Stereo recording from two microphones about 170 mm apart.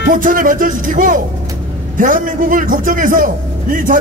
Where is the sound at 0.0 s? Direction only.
55° right (ahead or behind).